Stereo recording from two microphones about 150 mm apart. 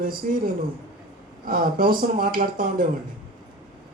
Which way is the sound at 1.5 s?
70° right (ahead or behind).